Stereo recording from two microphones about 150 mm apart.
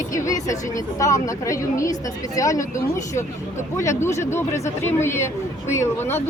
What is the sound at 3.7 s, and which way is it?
Speech, 20° left (ahead or behind).